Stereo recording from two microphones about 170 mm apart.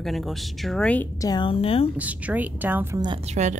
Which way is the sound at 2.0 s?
10° right (ahead or behind).